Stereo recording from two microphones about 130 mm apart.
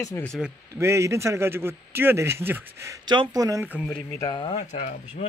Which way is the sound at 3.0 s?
35° right (ahead or behind).